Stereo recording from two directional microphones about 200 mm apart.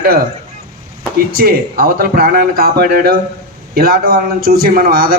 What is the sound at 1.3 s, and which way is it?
A man's voice, 45° right (ahead or behind).